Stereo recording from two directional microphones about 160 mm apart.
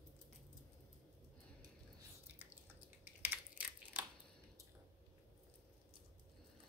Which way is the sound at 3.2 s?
10° right (ahead or behind).